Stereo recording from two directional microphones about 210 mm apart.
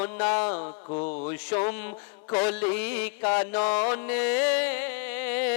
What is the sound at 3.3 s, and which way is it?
Mantra, 15° left (ahead or behind).